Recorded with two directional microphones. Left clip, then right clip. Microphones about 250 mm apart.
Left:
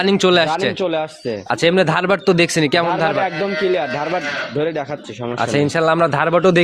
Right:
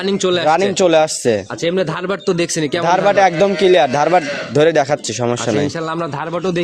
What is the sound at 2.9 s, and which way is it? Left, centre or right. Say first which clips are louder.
A man's voice: right 6 dB; right.